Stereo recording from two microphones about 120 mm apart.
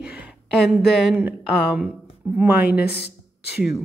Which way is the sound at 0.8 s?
Centre (ahead or behind).